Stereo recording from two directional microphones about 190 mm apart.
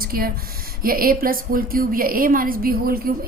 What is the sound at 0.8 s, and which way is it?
A woman's voice, 50° right (ahead or behind).